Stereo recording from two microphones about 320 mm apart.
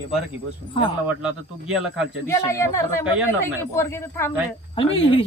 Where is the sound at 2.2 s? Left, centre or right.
Centre.